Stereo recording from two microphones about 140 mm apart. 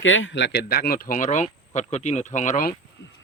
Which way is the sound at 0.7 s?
90° left.